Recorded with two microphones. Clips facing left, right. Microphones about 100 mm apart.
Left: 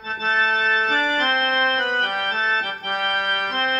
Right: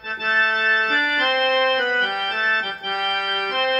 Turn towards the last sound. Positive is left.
turn(degrees=35)  # may be behind; listen again after turning